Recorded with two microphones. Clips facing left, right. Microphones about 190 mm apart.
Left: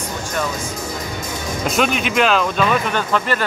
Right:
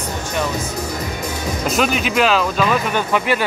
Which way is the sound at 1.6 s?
Centre (ahead or behind).